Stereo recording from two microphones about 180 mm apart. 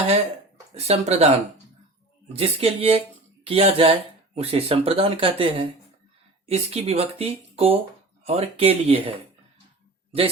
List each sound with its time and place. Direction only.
0.7 s speech: 35° right (ahead or behind)
2.3 s speech: 35° right (ahead or behind)